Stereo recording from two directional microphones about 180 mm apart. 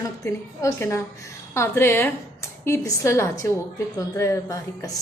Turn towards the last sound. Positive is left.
turn(degrees=20)  # may be behind; listen again after turning